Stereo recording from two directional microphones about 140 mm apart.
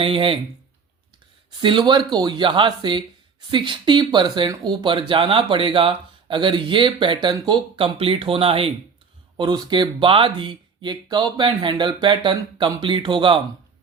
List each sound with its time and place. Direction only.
0.0 s speech: 40° right (ahead or behind)
1.6 s speech: 35° right (ahead or behind)
9.4 s speech: 30° right (ahead or behind)